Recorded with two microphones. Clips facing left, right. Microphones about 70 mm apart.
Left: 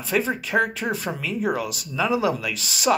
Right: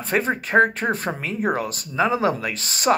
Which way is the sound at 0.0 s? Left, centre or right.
Right.